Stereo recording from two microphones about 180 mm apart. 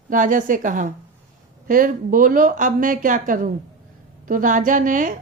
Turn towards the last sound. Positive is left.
turn(degrees=-45)  # may be behind; listen again after turning